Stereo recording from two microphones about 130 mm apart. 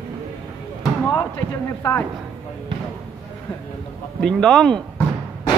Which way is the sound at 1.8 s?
20° left (ahead or behind).